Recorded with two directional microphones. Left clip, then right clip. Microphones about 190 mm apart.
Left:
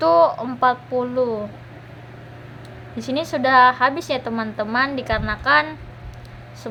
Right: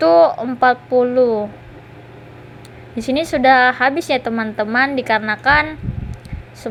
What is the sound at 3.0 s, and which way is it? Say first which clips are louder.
A woman's voice: right 6 dB; 15° right (ahead or behind).